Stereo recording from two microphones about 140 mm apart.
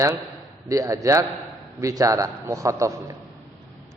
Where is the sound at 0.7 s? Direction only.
25° right (ahead or behind).